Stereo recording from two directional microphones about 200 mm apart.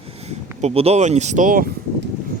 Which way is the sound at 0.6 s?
30° right (ahead or behind).